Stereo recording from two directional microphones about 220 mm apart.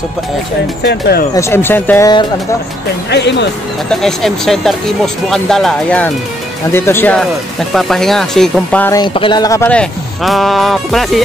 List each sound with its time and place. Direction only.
0.8 s speech: 45° left (ahead or behind)
1.3 s speech: 10° left (ahead or behind)
3.1 s speech: 50° left (ahead or behind)
3.9 s speech: centre (ahead or behind)
9.0 s speech: 20° left (ahead or behind); by 11.2 s centre (ahead or behind)